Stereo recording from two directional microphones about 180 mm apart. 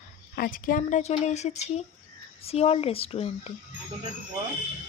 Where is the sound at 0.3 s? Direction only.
50° left (ahead or behind); by 3.5 s 35° left (ahead or behind).